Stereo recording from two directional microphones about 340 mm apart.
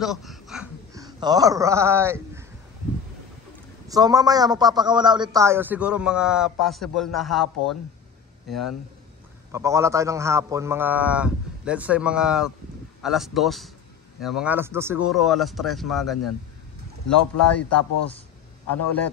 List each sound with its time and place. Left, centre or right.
0.0 s speech: centre
3.9 s a man's voice: centre